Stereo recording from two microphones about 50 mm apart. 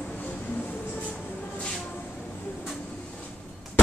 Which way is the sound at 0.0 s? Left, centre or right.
Left.